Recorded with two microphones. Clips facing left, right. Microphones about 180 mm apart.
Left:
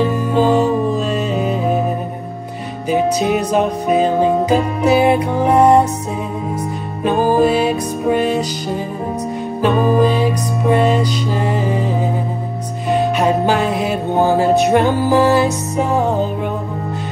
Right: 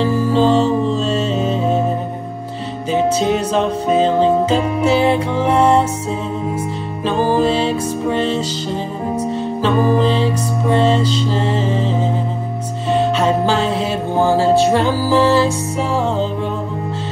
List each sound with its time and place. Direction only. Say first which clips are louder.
0.3 s music: even; 10° left (ahead or behind)
2.9 s music: even; 15° left (ahead or behind)
7.1 s music: left 2 dB; 15° left (ahead or behind)
9.6 s music: left 2 dB; 15° left (ahead or behind)